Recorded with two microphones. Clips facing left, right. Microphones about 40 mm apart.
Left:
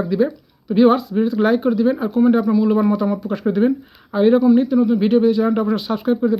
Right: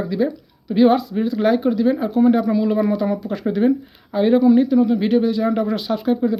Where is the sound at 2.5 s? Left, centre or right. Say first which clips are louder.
Left 2 dB; centre.